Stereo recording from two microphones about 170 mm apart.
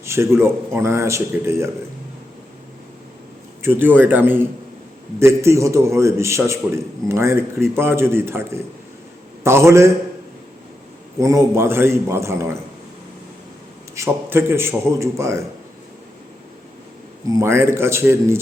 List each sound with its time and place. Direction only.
0.0 s a man's voice: 15° right (ahead or behind)
3.6 s a man's voice: 10° right (ahead or behind)
11.2 s a man's voice: 15° right (ahead or behind)
13.9 s a man's voice: 15° right (ahead or behind)
17.2 s a man's voice: 15° right (ahead or behind)